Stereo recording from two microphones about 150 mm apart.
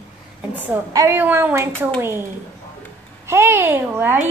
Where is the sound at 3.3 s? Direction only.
15° right (ahead or behind).